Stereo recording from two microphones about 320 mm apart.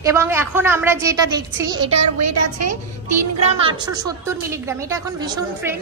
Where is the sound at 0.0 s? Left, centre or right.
Centre.